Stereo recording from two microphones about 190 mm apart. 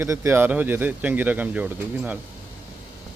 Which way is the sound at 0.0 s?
15° right (ahead or behind).